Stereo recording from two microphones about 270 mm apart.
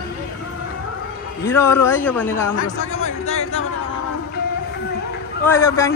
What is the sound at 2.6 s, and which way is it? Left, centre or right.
Speech, left.